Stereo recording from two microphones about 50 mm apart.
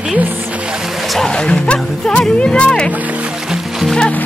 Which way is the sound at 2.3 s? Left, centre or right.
Left.